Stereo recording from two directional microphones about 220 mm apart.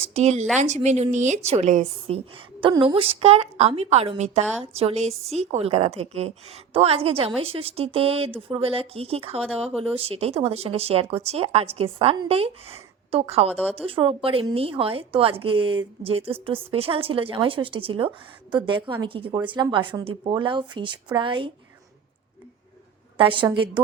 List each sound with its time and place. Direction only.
0.1 s a woman's voice: 30° right (ahead or behind)
13.5 s speech: 5° left (ahead or behind)
13.7 s a woman's voice: 25° right (ahead or behind)
23.1 s a woman's voice: 25° right (ahead or behind)